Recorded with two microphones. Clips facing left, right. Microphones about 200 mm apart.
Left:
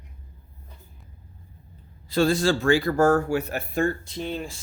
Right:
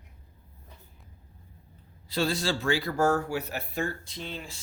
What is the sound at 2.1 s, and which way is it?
Speech, 50° left (ahead or behind).